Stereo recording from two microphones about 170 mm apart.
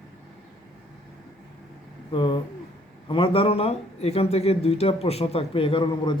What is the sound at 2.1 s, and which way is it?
A man's voice, 30° left (ahead or behind).